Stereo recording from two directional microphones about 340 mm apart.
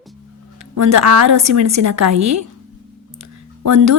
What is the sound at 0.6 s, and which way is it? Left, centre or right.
A woman's voice, right.